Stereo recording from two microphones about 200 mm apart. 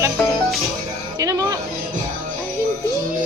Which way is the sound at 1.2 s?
15° right (ahead or behind).